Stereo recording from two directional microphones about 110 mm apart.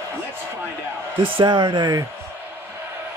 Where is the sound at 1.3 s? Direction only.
45° right (ahead or behind).